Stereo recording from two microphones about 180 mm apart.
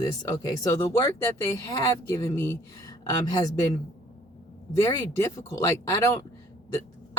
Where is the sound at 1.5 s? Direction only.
15° left (ahead or behind).